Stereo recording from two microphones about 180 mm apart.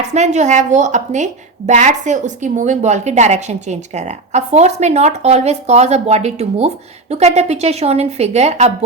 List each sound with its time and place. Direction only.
0.1 s a woman's voice: 40° right (ahead or behind)